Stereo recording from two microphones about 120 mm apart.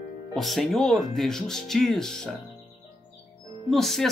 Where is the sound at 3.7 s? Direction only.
Centre (ahead or behind).